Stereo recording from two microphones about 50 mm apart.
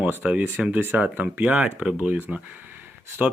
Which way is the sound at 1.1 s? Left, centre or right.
Right.